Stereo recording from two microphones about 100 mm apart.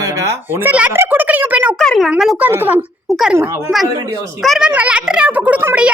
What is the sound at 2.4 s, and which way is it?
Speech, 15° right (ahead or behind).